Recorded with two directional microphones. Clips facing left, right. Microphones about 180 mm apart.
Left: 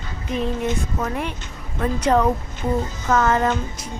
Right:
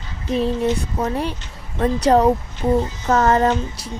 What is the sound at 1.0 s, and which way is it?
Speech, 30° right (ahead or behind).